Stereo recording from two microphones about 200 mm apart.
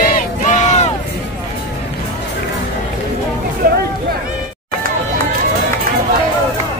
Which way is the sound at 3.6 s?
45° right (ahead or behind).